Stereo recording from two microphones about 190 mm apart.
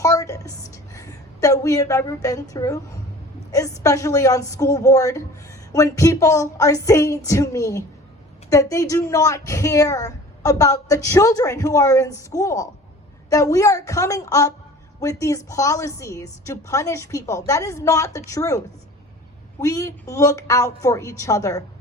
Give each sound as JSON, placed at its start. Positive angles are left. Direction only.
{"t": 0.0, "sound": "music", "side_deg": 15}
{"t": 0.7, "sound": "a woman's voice", "side_deg": 15}